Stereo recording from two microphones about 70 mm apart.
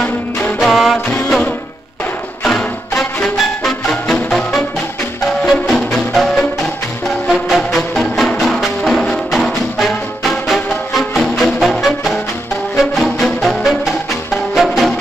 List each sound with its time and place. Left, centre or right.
0.0 s music: left
0.6 s music: centre
2.4 s music: centre